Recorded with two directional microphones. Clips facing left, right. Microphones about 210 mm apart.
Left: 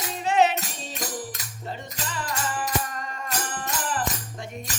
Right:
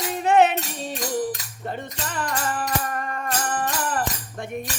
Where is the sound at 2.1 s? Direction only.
55° right (ahead or behind).